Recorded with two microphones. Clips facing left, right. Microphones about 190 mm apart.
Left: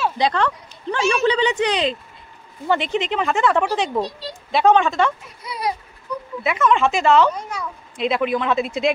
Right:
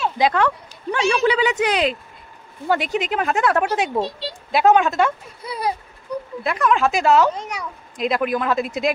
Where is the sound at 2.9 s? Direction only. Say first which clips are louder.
Even; 5° right (ahead or behind).